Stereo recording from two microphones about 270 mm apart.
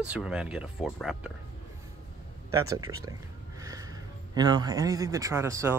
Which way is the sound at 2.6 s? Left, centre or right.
Right.